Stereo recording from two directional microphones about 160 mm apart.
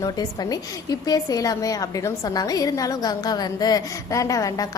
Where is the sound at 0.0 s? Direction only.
25° left (ahead or behind).